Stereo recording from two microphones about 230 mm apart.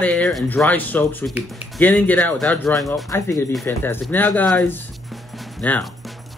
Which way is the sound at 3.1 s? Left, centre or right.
Centre.